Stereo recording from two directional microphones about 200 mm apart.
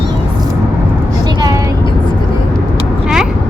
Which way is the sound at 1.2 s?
20° right (ahead or behind).